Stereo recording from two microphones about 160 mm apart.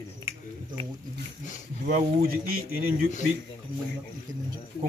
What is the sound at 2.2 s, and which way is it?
Speech, 70° right (ahead or behind).